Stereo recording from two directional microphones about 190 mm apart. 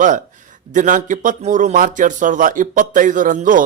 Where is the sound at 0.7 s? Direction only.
40° right (ahead or behind).